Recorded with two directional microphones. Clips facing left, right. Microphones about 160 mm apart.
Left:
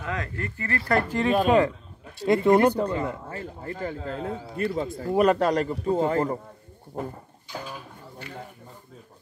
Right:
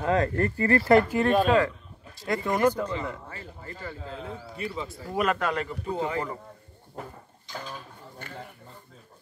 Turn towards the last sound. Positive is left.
turn(degrees=10)  # may be behind; listen again after turning